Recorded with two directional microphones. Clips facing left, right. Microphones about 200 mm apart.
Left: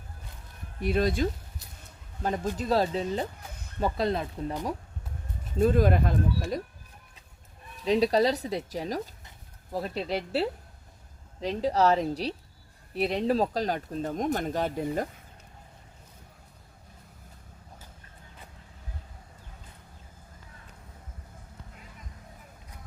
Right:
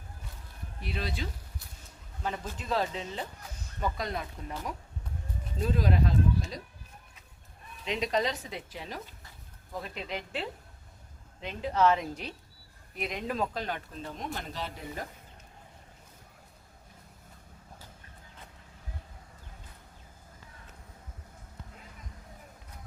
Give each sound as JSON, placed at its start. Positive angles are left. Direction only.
{"t": 0.8, "sound": "speech", "side_deg": 50}
{"t": 5.5, "sound": "speech", "side_deg": 50}
{"t": 7.9, "sound": "speech", "side_deg": 35}